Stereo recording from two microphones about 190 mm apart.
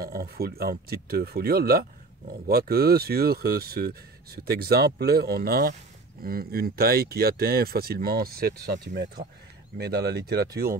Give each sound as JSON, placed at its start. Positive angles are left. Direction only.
{"t": 0.0, "sound": "speech", "side_deg": -50}